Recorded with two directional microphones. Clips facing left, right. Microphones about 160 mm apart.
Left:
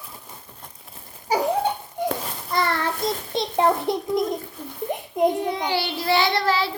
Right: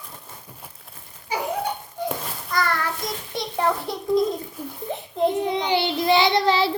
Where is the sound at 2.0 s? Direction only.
20° left (ahead or behind).